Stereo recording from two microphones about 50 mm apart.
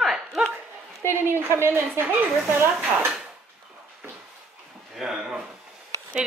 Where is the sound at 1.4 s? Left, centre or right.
Right.